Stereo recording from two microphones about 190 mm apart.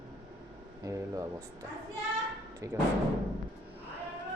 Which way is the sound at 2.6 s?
15° right (ahead or behind).